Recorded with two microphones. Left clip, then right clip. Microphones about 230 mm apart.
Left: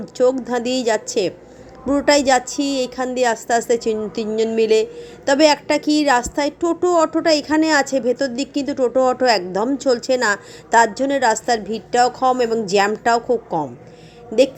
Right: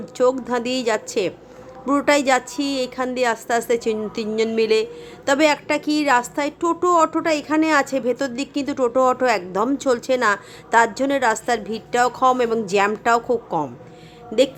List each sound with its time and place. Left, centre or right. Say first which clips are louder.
0.2 s a woman's voice: left 2 dB; centre